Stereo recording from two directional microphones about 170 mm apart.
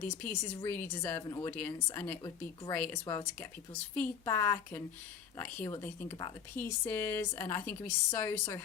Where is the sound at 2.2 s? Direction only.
25° left (ahead or behind).